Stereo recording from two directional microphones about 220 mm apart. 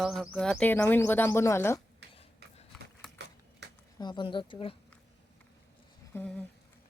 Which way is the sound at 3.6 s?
50° right (ahead or behind).